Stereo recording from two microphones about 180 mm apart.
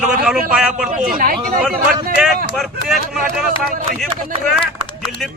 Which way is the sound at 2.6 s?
Centre (ahead or behind).